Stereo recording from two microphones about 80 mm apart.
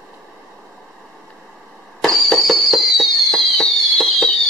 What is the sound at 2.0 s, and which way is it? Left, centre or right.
Fireworks, centre.